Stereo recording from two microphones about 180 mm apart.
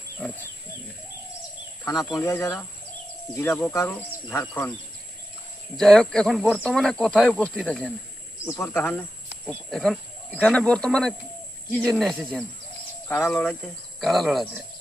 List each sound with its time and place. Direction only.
1.8 s speech: 20° left (ahead or behind)
5.7 s speech: centre (ahead or behind)